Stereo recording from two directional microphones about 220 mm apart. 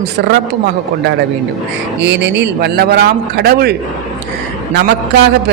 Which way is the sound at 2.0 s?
50° right (ahead or behind).